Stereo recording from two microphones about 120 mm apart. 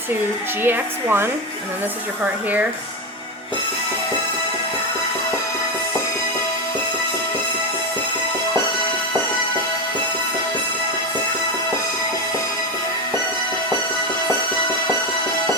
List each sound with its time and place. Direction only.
0.6 s speech: 20° right (ahead or behind)